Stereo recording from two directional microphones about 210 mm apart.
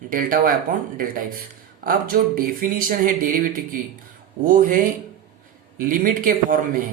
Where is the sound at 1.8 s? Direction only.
45° right (ahead or behind).